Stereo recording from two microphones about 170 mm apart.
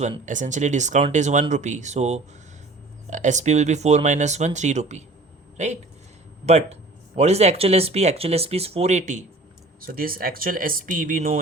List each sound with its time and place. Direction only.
0.3 s speech: 45° right (ahead or behind)
9.8 s speech: 60° right (ahead or behind)